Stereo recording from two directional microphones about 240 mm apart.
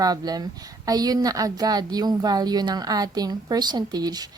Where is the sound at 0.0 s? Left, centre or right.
Centre.